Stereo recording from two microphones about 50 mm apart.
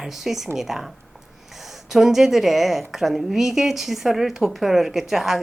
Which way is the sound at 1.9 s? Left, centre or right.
Centre.